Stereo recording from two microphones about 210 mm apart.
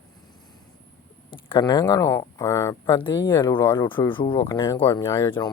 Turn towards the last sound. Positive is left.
turn(degrees=10)  # may be behind; listen again after turning